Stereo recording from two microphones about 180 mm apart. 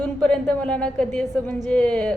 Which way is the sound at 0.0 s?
5° left (ahead or behind).